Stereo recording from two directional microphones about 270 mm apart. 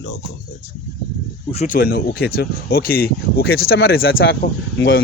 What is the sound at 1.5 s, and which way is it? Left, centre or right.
Speech, left.